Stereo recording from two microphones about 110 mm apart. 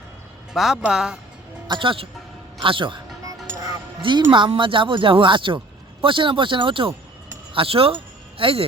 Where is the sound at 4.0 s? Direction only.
45° right (ahead or behind).